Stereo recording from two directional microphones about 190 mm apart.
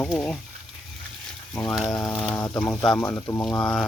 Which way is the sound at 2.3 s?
15° left (ahead or behind).